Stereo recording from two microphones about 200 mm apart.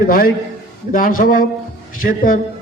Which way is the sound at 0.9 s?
45° left (ahead or behind).